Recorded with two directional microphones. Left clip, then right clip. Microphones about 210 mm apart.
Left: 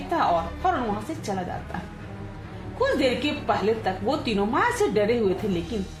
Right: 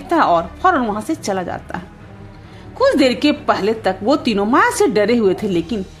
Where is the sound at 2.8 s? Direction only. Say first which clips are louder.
Right 9 dB; 55° right (ahead or behind).